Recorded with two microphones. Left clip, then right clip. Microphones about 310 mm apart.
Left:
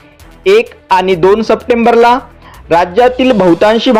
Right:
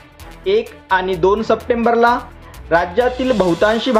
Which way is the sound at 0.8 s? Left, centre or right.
Left.